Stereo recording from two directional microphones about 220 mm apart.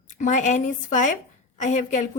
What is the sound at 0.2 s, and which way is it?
Speech, 35° left (ahead or behind).